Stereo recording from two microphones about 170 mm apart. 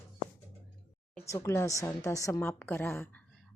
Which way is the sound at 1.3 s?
15° left (ahead or behind).